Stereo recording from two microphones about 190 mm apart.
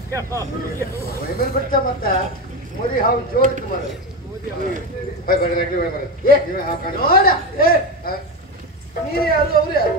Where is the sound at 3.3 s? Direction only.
50° left (ahead or behind).